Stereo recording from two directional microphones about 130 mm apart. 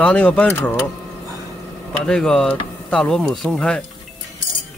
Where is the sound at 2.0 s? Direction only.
5° left (ahead or behind).